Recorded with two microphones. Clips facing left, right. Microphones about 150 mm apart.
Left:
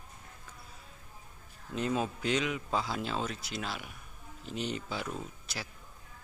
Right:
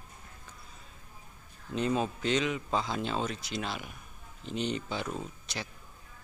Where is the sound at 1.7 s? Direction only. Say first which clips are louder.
Right 2 dB; 5° left (ahead or behind).